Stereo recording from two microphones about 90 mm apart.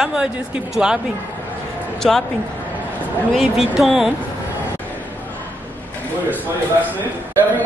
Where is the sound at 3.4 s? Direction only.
Centre (ahead or behind).